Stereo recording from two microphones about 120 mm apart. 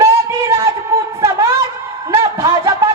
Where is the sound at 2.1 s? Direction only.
25° right (ahead or behind).